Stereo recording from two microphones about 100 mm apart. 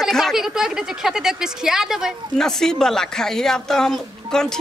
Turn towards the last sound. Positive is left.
turn(degrees=5)  # may be behind; listen again after turning